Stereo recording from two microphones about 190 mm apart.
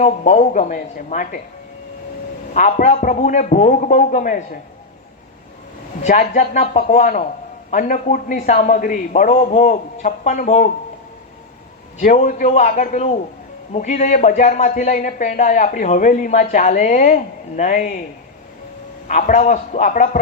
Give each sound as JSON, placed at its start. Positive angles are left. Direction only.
{"t": 0.0, "sound": "a man's voice", "side_deg": 35}
{"t": 2.5, "sound": "a man's voice", "side_deg": 40}
{"t": 6.0, "sound": "a man's voice", "side_deg": 35}
{"t": 11.9, "sound": "a man's voice", "side_deg": 40}
{"t": 19.0, "sound": "a man's voice", "side_deg": 40}